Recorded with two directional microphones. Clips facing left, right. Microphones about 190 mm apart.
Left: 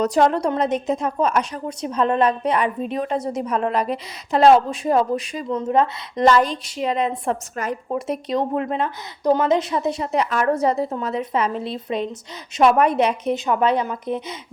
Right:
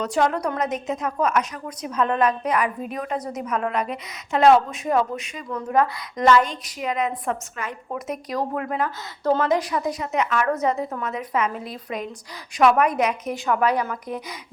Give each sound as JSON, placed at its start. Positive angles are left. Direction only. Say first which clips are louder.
{"t": 0.0, "sound": "a woman's voice", "louder": "left 4 dB", "side_deg": 35}
{"t": 7.5, "sound": "a woman's voice", "louder": "left 6 dB", "side_deg": 40}
{"t": 7.9, "sound": "speech", "louder": "left 3 dB", "side_deg": 30}